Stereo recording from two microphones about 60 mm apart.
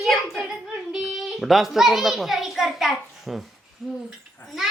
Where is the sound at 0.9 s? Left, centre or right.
Centre.